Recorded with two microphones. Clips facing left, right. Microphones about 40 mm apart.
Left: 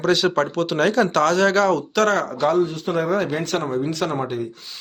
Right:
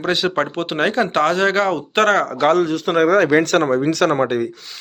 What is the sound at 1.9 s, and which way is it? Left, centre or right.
A man's voice, right.